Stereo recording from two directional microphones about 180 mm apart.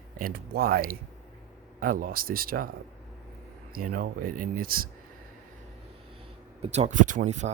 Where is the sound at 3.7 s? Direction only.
50° right (ahead or behind).